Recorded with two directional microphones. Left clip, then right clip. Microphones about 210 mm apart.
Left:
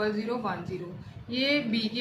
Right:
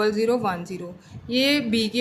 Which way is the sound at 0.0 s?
55° right (ahead or behind).